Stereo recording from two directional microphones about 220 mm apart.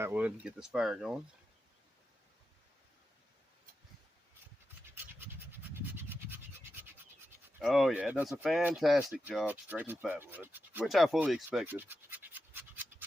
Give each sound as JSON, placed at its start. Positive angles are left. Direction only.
{"t": 0.0, "sound": "speech", "side_deg": -5}
{"t": 4.9, "sound": "a sound", "side_deg": -10}
{"t": 7.6, "sound": "speech", "side_deg": 0}